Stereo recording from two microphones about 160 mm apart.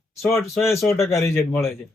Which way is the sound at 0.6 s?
15° left (ahead or behind).